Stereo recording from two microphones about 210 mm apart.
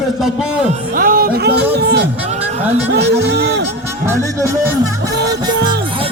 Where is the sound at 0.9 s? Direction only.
40° right (ahead or behind).